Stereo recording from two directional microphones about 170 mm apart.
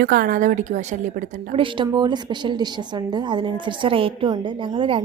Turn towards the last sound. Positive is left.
turn(degrees=-30)  # may be behind; listen again after turning